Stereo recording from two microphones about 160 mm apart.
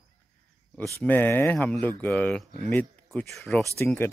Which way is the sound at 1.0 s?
10° left (ahead or behind).